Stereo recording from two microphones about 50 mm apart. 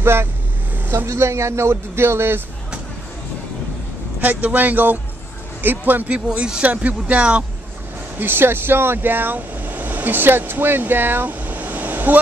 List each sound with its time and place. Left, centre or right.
0.0 s speech: right
0.9 s speech: right
4.2 s speech: right
6.0 s speech: right
8.2 s speech: right